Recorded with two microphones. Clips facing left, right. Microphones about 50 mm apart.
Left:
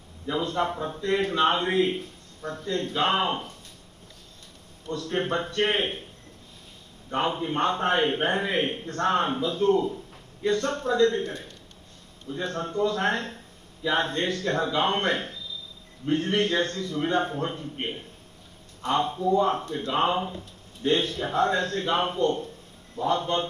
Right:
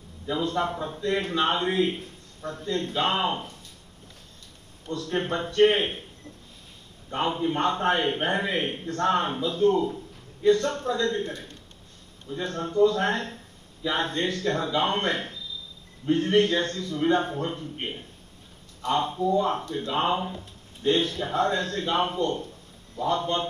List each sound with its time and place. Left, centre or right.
0.3 s a man's voice: left
4.8 s a man's voice: left
7.1 s a man's voice: left
18.8 s a man's voice: left